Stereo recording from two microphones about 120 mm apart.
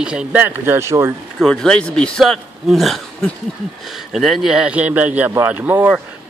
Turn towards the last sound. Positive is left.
turn(degrees=-10)  # may be behind; listen again after turning